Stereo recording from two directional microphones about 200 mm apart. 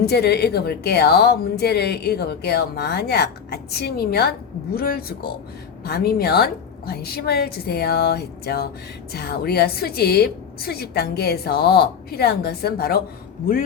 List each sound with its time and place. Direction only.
0.0 s a woman's voice: 55° left (ahead or behind)